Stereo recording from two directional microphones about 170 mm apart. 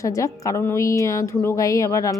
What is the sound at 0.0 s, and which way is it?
A woman's voice, 20° left (ahead or behind).